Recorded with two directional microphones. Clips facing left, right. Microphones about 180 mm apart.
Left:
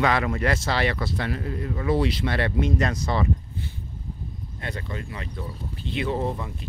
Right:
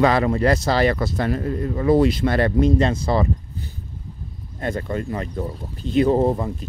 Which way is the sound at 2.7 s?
30° right (ahead or behind).